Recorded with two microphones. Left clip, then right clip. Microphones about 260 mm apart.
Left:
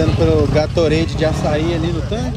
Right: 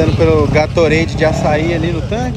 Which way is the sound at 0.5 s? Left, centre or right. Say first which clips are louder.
Right 4 dB; right.